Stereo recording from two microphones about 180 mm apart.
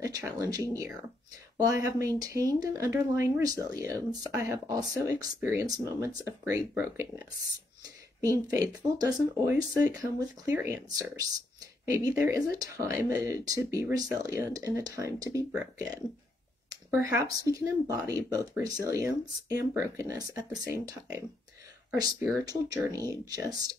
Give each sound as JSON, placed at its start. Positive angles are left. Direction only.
{"t": 0.0, "sound": "speech", "side_deg": -15}
{"t": 8.3, "sound": "speech", "side_deg": -20}
{"t": 17.0, "sound": "speech", "side_deg": -20}